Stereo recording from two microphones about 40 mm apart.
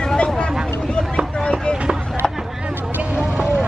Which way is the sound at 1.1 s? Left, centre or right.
Left.